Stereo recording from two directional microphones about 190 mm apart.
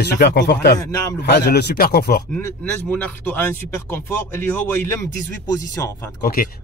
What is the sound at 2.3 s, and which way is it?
Speech, 5° left (ahead or behind).